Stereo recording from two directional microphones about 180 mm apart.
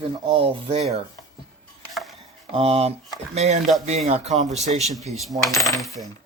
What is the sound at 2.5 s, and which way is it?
Speech, 35° right (ahead or behind).